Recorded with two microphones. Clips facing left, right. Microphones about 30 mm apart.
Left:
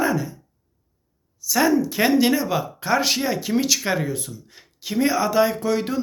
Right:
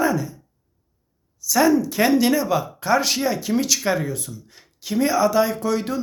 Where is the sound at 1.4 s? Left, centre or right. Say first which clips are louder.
Right 2 dB; centre.